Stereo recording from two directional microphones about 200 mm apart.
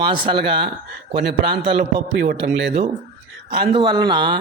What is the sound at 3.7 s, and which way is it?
Speech, 20° right (ahead or behind).